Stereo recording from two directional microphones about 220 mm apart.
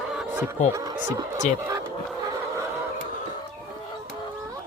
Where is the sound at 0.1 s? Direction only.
Centre (ahead or behind).